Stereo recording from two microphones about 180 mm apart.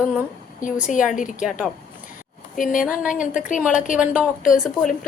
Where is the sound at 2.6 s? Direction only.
45° left (ahead or behind).